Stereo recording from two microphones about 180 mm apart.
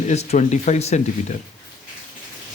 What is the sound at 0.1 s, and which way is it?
Speech, 40° left (ahead or behind).